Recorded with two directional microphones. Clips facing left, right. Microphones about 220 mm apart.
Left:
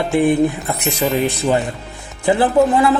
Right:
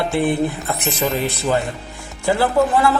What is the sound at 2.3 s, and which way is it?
Speech, 20° left (ahead or behind).